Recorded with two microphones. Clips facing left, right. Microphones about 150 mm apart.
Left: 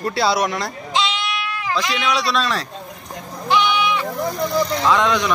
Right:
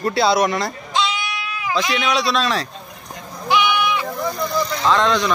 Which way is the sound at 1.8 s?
10° right (ahead or behind).